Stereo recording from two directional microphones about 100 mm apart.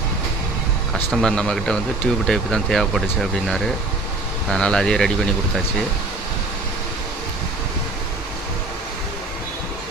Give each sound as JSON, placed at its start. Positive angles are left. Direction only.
{"t": 1.2, "sound": "speech", "side_deg": 5}